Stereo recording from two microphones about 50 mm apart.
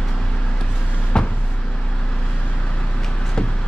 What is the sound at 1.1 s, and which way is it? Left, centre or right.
Vehicle, centre.